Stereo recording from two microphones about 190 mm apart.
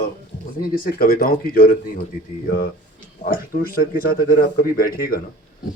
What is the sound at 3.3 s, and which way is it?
Speech, 50° left (ahead or behind).